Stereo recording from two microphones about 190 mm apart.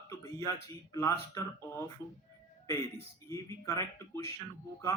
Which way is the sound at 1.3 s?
15° left (ahead or behind).